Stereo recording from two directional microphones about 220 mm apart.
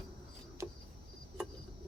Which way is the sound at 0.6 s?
10° right (ahead or behind).